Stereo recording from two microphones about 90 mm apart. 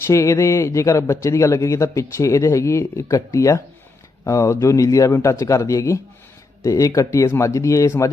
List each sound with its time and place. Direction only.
0.1 s speech: 35° left (ahead or behind)